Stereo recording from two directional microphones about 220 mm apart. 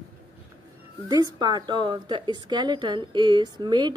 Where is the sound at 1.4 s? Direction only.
20° right (ahead or behind).